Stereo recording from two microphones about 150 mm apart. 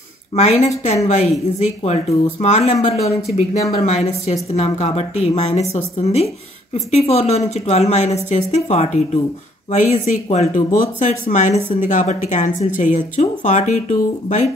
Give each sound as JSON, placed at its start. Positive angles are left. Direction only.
{"t": 0.4, "sound": "a woman's voice", "side_deg": 50}